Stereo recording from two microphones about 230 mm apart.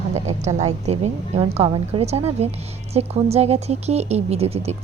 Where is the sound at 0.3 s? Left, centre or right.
Right.